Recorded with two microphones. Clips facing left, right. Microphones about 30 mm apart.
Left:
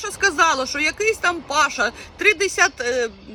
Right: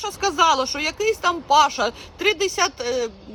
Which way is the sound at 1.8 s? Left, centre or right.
Centre.